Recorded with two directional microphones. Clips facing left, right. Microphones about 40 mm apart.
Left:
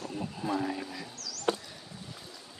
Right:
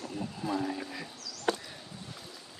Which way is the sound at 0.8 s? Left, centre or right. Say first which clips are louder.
Even; centre.